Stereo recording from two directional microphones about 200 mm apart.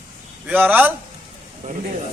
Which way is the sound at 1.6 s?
35° right (ahead or behind).